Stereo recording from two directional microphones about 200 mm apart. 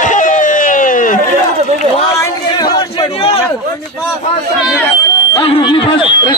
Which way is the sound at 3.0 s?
30° left (ahead or behind).